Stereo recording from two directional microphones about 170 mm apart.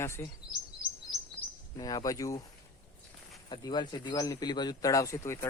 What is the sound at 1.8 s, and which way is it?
Speech, 20° left (ahead or behind).